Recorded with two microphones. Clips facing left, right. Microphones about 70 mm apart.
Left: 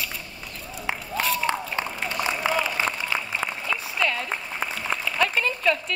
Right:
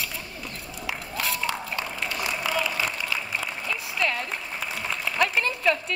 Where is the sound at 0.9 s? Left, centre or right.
Left.